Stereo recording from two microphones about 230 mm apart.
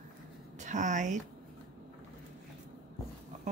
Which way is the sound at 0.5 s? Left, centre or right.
Right.